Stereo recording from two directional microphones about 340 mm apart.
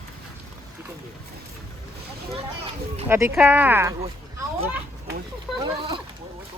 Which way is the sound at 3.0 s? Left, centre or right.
Centre.